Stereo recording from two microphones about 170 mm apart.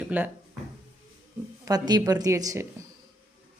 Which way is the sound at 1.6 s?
25° right (ahead or behind).